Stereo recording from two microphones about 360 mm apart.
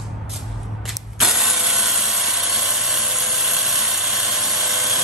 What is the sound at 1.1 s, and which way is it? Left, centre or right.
Printer, centre.